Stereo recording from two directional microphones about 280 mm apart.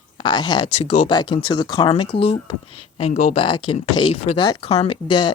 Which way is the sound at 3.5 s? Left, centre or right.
Left.